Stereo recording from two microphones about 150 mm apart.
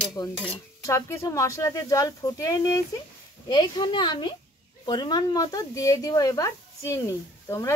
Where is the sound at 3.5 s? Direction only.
30° left (ahead or behind).